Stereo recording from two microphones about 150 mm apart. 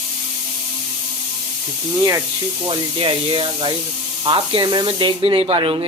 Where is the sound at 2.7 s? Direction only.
35° right (ahead or behind).